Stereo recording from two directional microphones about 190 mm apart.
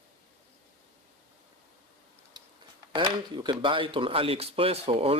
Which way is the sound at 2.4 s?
20° right (ahead or behind).